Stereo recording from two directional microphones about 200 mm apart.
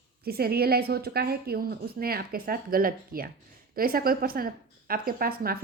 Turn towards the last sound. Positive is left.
turn(degrees=-45)  # may be behind; listen again after turning